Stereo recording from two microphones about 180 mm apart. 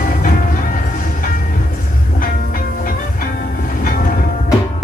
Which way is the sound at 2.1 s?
50° left (ahead or behind).